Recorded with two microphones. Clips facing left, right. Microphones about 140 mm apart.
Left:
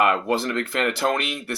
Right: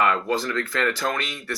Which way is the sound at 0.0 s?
25° left (ahead or behind).